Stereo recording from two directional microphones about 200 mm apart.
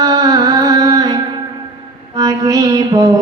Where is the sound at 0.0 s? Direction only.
20° right (ahead or behind).